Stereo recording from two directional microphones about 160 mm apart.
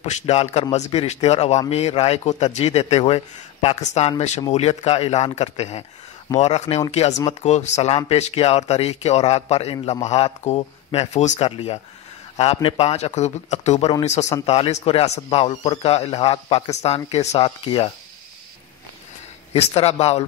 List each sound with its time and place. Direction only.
0.0 s a man's voice: 45° left (ahead or behind)
19.5 s speech: 40° left (ahead or behind)